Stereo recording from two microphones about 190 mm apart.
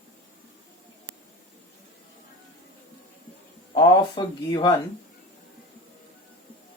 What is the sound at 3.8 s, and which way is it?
Speech, 25° left (ahead or behind).